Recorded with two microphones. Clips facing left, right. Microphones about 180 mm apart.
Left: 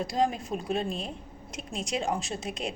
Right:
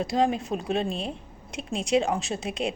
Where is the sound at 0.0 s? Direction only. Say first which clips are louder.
Right 3 dB; 25° right (ahead or behind).